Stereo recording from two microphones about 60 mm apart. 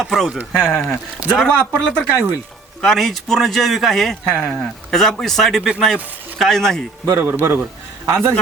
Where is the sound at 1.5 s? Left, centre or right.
Centre.